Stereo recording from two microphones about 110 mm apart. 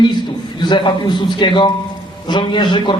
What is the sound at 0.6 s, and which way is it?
A man's voice, 45° left (ahead or behind).